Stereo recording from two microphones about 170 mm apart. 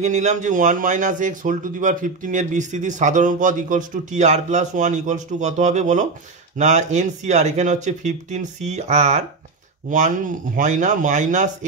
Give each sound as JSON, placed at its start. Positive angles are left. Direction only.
{"t": 0.0, "sound": "speech", "side_deg": -45}